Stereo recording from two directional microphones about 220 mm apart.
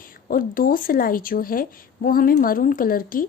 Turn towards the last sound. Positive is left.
turn(degrees=40)  # may be behind; listen again after turning